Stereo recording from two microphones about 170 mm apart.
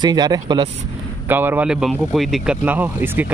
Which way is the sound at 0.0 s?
25° right (ahead or behind).